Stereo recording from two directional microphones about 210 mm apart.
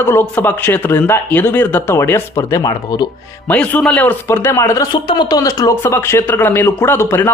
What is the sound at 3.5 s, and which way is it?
Speech, 5° left (ahead or behind).